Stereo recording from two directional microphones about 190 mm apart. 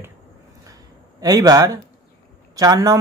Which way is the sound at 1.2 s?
20° right (ahead or behind).